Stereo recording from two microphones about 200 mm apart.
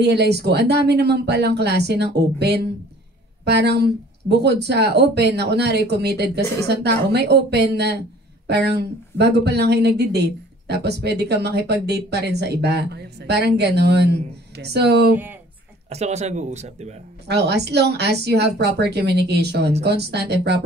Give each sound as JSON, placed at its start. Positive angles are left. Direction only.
{"t": 0.0, "sound": "speech", "side_deg": -55}
{"t": 15.9, "sound": "speech", "side_deg": -35}
{"t": 17.3, "sound": "speech", "side_deg": -55}